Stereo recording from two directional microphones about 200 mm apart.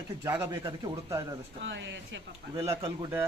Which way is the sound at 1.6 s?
65° right (ahead or behind).